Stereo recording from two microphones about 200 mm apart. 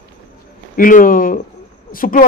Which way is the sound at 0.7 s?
45° left (ahead or behind).